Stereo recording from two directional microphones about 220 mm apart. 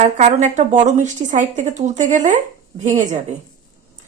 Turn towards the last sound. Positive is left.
turn(degrees=-35)  # may be behind; listen again after turning